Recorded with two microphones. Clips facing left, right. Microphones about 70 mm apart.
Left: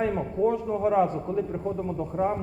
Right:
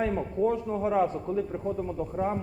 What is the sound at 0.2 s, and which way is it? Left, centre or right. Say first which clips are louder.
Speech: left 2 dB; centre.